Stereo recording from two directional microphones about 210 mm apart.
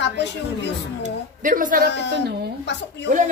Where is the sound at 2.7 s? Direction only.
55° left (ahead or behind).